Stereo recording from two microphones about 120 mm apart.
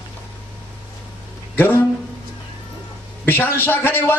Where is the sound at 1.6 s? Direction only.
20° left (ahead or behind).